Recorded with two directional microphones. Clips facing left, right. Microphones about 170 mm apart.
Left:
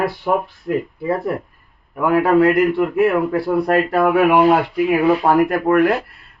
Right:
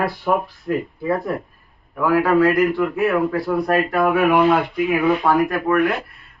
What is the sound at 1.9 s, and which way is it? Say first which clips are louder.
A man's voice: left 2 dB; 25° left (ahead or behind).